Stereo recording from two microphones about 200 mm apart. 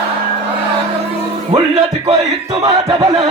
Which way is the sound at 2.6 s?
15° right (ahead or behind).